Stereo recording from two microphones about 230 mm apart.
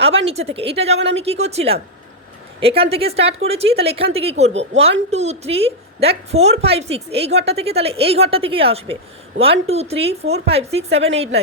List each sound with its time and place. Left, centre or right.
0.0 s a woman's voice: right